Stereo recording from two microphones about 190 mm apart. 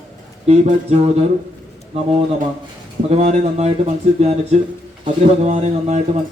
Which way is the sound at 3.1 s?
35° right (ahead or behind).